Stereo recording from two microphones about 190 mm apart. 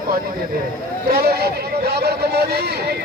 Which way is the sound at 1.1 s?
55° right (ahead or behind).